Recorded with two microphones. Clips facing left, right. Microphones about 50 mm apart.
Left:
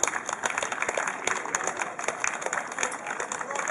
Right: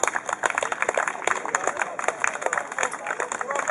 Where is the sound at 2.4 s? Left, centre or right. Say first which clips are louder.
Right 4 dB; centre.